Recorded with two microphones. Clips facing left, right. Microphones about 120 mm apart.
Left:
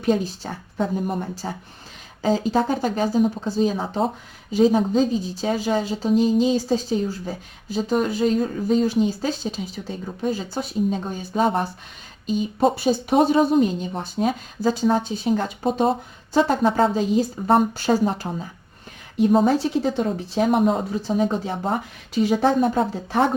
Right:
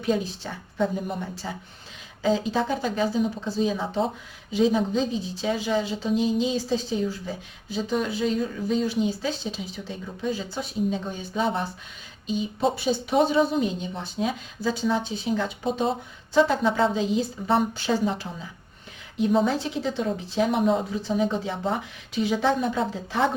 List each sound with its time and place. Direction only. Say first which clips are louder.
0.0 s speech: left 4 dB; 40° left (ahead or behind)